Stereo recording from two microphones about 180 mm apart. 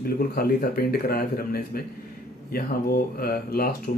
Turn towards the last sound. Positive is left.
turn(degrees=55)  # may be behind; listen again after turning